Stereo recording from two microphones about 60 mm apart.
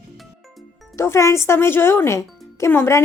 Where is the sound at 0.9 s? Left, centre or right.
Left.